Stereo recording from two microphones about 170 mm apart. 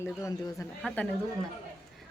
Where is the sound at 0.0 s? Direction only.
20° left (ahead or behind).